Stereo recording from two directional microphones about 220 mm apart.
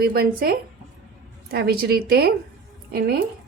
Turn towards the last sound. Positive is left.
turn(degrees=-45)  # may be behind; listen again after turning